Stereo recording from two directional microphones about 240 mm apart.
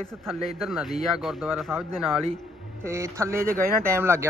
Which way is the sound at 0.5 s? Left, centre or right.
Centre.